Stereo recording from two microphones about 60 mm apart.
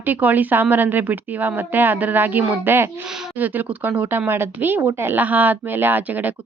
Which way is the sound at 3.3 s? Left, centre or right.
Right.